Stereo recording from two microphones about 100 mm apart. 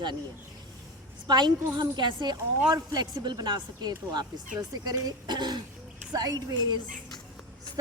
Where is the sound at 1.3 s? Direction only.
45° right (ahead or behind).